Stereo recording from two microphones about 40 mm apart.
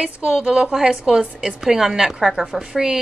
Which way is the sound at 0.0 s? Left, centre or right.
Right.